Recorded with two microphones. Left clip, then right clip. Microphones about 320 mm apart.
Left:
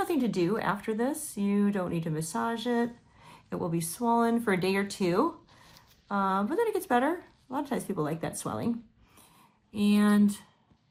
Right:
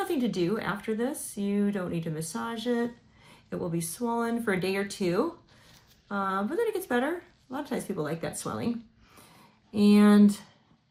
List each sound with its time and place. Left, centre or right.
0.0 s speech: centre
9.7 s speech: centre